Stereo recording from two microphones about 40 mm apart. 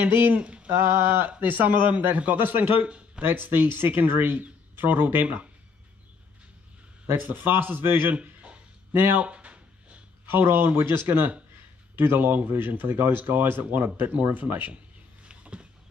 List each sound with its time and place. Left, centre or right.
0.0 s speech: right
0.3 s mantra: right
1.0 s speech: right
7.2 s speech: right
8.2 s a sound: right
8.9 s speech: right
9.2 s a sound: right
10.2 s speech: right
15.2 s a sound: right